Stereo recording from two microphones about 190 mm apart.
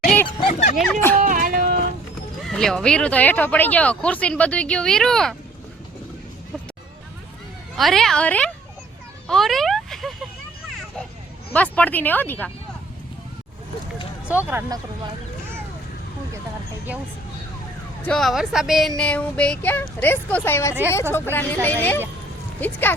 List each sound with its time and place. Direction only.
0.0 s a sound: 5° left (ahead or behind)
0.3 s a sound: 25° left (ahead or behind)
1.2 s music: 45° right (ahead or behind)
2.4 s speech: 5° left (ahead or behind)
7.8 s speech: centre (ahead or behind)
9.2 s a sound: centre (ahead or behind)
11.5 s speech: 5° left (ahead or behind)
14.3 s speech: 10° right (ahead or behind)
18.0 s speech: centre (ahead or behind)